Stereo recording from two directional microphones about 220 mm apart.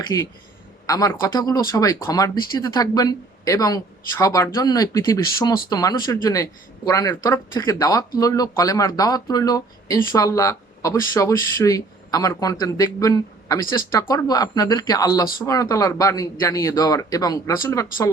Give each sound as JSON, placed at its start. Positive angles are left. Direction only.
{"t": 0.1, "sound": "a man's voice", "side_deg": 15}